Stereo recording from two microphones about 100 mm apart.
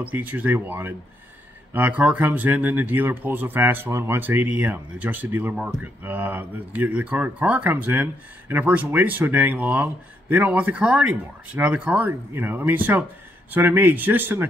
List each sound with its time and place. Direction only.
0.0 s speech: 15° right (ahead or behind)